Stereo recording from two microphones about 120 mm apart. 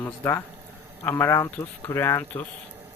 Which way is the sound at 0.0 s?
20° left (ahead or behind).